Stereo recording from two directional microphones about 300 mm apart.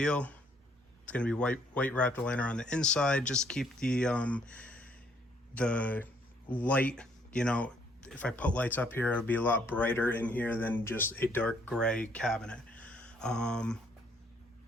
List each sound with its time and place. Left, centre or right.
0.0 s speech: centre